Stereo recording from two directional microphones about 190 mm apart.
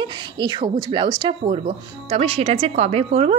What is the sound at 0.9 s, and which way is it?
A woman's voice, 25° right (ahead or behind).